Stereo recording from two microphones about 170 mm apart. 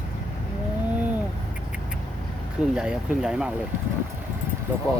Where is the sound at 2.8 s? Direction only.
5° right (ahead or behind).